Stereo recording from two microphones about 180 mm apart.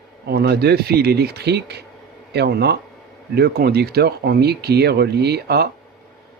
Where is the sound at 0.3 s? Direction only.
65° right (ahead or behind).